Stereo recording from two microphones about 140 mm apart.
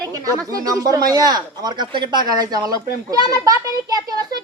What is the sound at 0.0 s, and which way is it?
Speech, 25° right (ahead or behind).